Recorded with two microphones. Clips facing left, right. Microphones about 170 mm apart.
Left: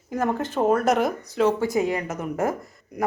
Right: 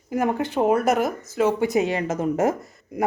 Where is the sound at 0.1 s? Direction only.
10° right (ahead or behind).